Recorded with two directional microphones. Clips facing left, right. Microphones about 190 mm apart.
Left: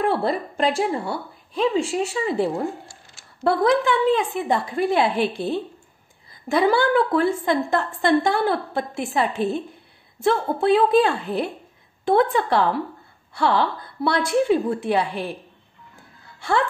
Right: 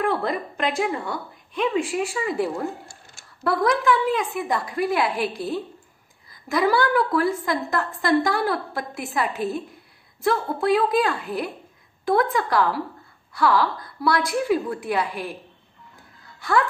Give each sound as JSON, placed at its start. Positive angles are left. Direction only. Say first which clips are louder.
{"t": 0.0, "sound": "a woman's voice", "louder": "left 2 dB", "side_deg": 30}
{"t": 16.3, "sound": "music", "louder": "even", "side_deg": 25}